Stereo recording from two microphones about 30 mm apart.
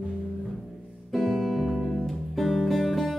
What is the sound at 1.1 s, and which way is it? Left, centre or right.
Music, centre.